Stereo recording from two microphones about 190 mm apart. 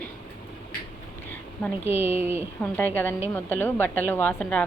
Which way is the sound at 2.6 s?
10° left (ahead or behind).